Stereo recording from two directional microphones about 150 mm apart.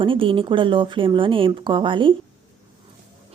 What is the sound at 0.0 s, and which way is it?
Speech, 35° right (ahead or behind).